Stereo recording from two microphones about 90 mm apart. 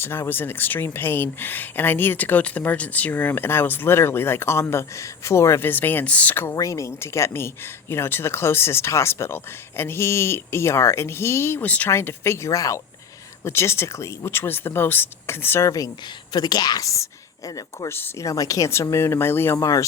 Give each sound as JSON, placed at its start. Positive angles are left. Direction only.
{"t": 0.0, "sound": "speech", "side_deg": 25}
{"t": 6.6, "sound": "speech", "side_deg": 35}
{"t": 11.6, "sound": "speech", "side_deg": 15}
{"t": 11.9, "sound": "speech", "side_deg": 30}
{"t": 16.3, "sound": "a woman's voice", "side_deg": 50}
{"t": 17.8, "sound": "speech", "side_deg": 25}
{"t": 18.3, "sound": "speech", "side_deg": 40}
{"t": 19.5, "sound": "speech", "side_deg": 40}